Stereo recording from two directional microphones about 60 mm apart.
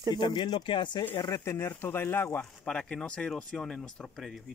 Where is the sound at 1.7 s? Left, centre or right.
Left.